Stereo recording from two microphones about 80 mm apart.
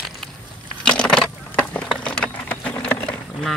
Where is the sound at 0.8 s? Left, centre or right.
Centre.